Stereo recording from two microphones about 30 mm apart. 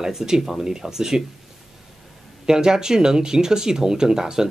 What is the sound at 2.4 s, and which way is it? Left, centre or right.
Speech, right.